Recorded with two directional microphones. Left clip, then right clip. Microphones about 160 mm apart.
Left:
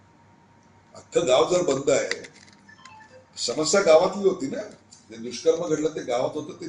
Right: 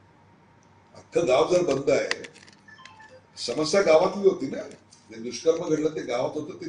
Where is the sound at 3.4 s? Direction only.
Centre (ahead or behind).